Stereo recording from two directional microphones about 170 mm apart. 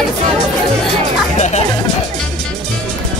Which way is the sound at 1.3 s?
40° left (ahead or behind).